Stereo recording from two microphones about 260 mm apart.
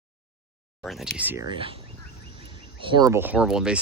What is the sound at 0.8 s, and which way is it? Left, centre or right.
Speech, centre.